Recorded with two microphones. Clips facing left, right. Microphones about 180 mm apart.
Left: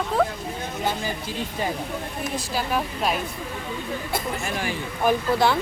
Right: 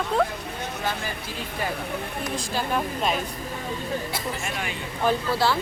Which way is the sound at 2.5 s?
5° left (ahead or behind).